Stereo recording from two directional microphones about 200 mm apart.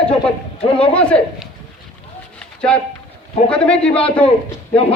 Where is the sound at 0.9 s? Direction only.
5° left (ahead or behind).